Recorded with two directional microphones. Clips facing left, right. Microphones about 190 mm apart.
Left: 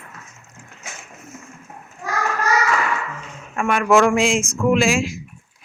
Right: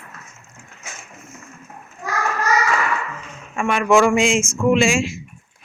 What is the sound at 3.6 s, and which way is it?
Speech, 5° left (ahead or behind).